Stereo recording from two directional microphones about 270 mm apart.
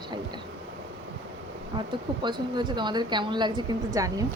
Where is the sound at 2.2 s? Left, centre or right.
Centre.